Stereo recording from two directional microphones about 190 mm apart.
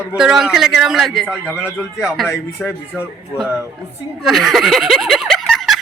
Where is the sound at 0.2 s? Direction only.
Centre (ahead or behind).